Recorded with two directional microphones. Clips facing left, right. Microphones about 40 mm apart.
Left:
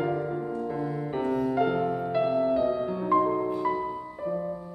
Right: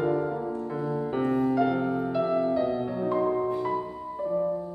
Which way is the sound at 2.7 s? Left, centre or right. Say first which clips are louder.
Right 1 dB; centre.